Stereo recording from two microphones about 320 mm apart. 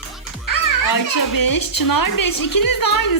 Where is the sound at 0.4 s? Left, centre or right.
Left.